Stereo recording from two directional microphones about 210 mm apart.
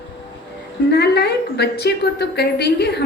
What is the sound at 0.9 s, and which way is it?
A woman's voice, 50° left (ahead or behind).